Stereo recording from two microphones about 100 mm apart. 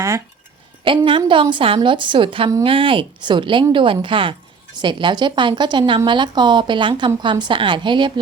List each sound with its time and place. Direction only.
0.9 s a woman's voice: 60° right (ahead or behind)